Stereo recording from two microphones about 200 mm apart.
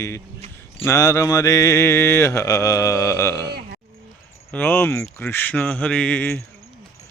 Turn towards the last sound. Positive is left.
turn(degrees=10)  # may be behind; listen again after turning